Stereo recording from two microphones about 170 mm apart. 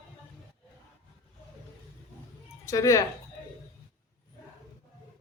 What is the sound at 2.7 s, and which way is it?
Speech, 20° left (ahead or behind).